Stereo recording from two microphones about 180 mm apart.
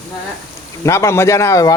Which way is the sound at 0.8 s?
15° left (ahead or behind).